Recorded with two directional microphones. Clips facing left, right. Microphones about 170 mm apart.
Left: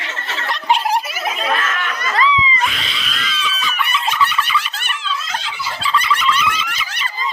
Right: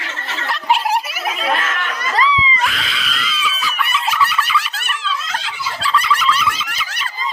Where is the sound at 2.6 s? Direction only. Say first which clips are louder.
Right 1 dB; centre (ahead or behind).